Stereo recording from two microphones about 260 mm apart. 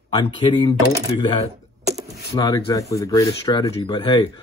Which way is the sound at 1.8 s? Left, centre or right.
Right.